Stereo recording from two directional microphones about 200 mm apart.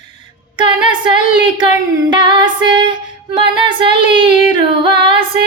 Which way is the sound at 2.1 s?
25° right (ahead or behind).